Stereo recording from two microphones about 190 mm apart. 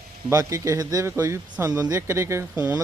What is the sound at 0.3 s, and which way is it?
Speech, 15° right (ahead or behind).